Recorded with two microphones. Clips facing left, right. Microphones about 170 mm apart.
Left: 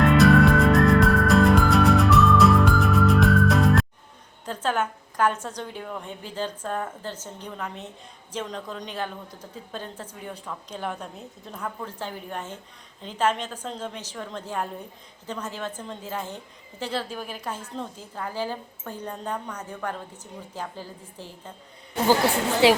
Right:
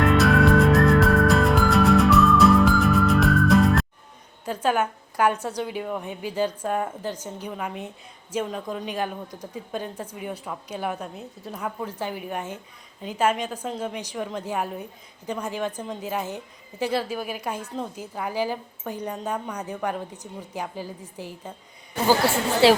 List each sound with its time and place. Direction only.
0.0 s music: centre (ahead or behind)
4.4 s a woman's voice: 10° right (ahead or behind)
22.6 s a woman's voice: 15° left (ahead or behind)